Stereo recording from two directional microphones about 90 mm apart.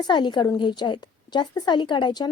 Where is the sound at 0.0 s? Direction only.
55° left (ahead or behind).